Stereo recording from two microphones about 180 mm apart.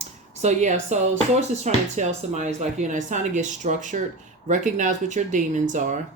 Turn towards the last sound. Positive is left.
turn(degrees=-45)  # may be behind; listen again after turning